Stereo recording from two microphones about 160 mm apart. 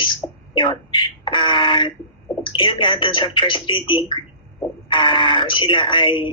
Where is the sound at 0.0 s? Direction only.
30° left (ahead or behind).